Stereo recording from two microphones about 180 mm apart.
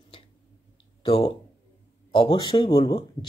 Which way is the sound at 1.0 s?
30° left (ahead or behind).